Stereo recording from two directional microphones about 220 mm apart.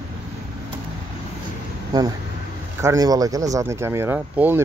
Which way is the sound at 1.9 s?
15° right (ahead or behind).